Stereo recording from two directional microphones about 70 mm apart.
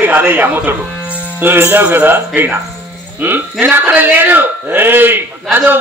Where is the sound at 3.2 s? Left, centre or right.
Right.